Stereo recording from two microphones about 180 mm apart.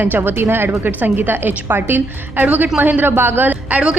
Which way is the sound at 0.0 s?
10° right (ahead or behind).